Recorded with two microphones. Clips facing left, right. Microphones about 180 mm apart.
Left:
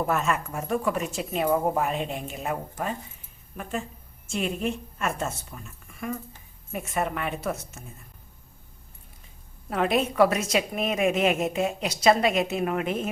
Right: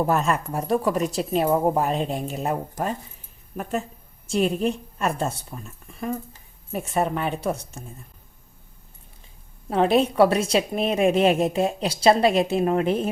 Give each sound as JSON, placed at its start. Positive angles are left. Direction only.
{"t": 0.1, "sound": "a woman's voice", "side_deg": -35}
{"t": 9.6, "sound": "a woman's voice", "side_deg": -30}